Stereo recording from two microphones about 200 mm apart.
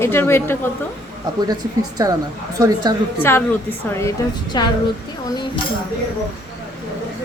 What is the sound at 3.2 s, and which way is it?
Speech, 10° left (ahead or behind).